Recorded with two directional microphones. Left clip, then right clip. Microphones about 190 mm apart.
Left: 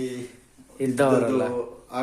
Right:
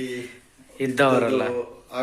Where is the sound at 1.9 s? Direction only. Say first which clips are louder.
Right 1 dB; 60° left (ahead or behind).